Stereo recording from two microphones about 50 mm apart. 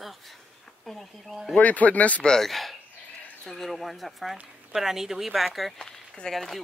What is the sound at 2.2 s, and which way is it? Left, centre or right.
A woman's voice, centre.